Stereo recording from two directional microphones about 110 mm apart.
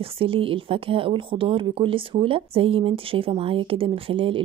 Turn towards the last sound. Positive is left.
turn(degrees=-55)  # may be behind; listen again after turning